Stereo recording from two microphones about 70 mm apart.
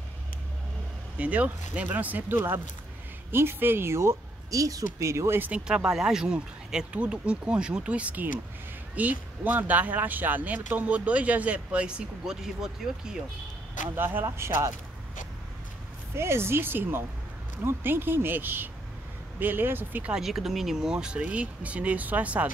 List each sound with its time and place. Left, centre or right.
1.1 s speech: right
2.3 s speech: right
5.4 s speech: centre
13.9 s speech: right
16.2 s speech: right
20.1 s speech: centre; by 22.5 s right